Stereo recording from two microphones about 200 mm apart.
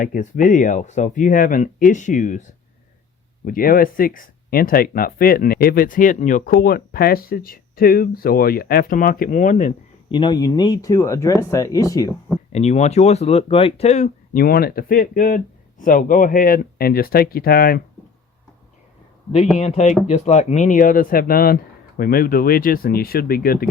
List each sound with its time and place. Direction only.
0.0 s speech: 40° left (ahead or behind)
10.1 s speech: 25° left (ahead or behind)
12.5 s speech: 35° left (ahead or behind); by 17.8 s 50° left (ahead or behind)
19.5 s speech: 35° left (ahead or behind)